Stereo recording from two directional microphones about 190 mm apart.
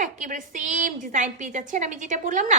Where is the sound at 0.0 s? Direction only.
40° right (ahead or behind).